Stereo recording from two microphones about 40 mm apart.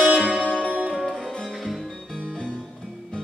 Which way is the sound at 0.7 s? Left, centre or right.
Centre.